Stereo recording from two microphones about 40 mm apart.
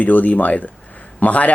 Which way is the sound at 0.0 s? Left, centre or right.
Left.